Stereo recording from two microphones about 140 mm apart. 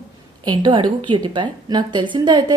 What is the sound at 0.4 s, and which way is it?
A woman's voice, 30° right (ahead or behind).